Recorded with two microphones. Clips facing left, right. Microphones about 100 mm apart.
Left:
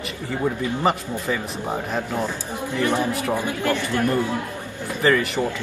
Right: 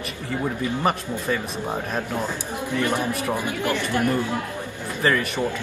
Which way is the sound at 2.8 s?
20° left (ahead or behind).